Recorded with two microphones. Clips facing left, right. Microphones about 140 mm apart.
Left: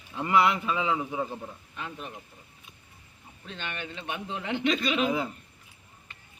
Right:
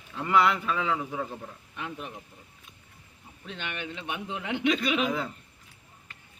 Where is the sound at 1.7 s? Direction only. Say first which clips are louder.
Right 3 dB; 15° right (ahead or behind).